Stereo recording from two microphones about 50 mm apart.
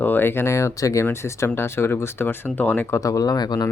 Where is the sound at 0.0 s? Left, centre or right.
Left.